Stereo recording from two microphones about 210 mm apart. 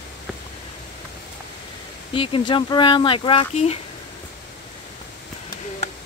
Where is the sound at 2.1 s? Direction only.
25° left (ahead or behind).